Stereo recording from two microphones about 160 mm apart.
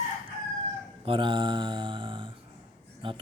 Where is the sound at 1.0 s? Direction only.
35° right (ahead or behind).